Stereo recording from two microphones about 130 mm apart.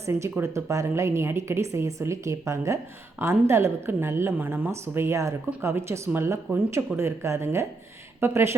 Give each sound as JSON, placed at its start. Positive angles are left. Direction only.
{"t": 0.0, "sound": "a woman's voice", "side_deg": -20}